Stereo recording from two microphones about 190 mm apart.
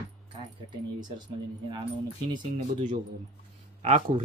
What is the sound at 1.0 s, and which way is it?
Speech, 20° right (ahead or behind).